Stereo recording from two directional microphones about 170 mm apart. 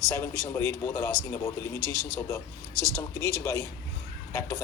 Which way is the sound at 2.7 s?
20° right (ahead or behind).